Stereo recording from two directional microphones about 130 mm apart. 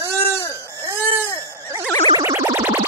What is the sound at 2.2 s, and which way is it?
Music, 20° right (ahead or behind).